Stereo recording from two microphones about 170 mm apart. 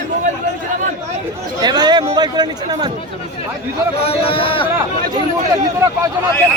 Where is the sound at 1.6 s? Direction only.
25° right (ahead or behind).